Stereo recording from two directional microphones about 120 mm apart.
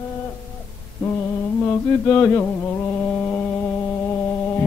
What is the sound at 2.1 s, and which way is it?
Speech, 15° left (ahead or behind).